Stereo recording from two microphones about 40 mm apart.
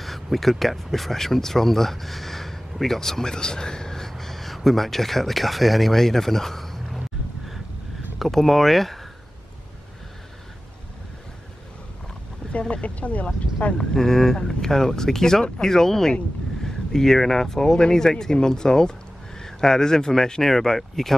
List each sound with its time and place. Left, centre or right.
0.0 s speech: centre
8.2 s speech: centre
12.5 s speech: left
13.7 s speech: centre